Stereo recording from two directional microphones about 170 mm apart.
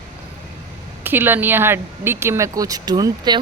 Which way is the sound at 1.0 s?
10° right (ahead or behind).